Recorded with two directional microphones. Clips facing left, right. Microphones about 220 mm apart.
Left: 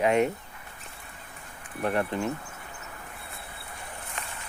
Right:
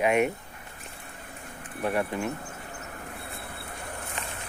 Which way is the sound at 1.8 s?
10° right (ahead or behind).